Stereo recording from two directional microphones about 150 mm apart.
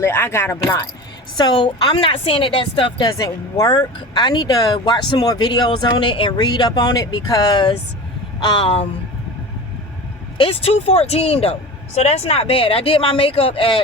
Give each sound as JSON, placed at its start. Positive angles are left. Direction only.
{"t": 0.0, "sound": "a woman's voice", "side_deg": 15}
{"t": 10.3, "sound": "speech", "side_deg": 35}